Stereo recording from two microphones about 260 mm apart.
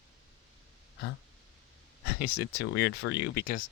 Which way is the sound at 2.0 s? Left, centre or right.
Left.